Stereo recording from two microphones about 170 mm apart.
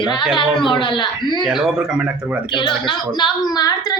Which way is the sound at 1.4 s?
Centre (ahead or behind).